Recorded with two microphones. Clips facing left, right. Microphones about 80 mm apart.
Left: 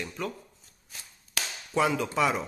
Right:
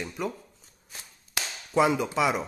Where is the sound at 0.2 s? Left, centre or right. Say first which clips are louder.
Right 3 dB; centre.